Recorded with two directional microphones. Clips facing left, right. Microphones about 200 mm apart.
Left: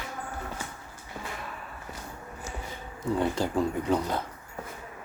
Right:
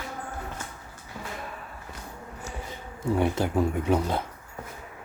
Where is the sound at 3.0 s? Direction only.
10° right (ahead or behind).